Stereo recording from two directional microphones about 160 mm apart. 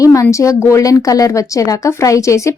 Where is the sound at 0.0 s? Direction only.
20° left (ahead or behind).